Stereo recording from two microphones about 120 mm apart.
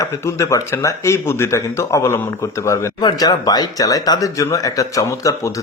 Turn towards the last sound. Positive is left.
turn(degrees=25)  # may be behind; listen again after turning